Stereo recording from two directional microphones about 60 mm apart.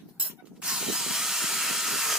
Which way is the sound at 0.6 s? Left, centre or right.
Centre.